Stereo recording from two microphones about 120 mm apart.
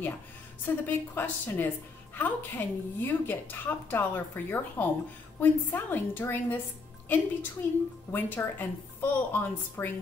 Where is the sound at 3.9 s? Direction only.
15° left (ahead or behind).